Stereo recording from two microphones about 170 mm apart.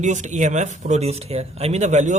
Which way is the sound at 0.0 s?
45° right (ahead or behind).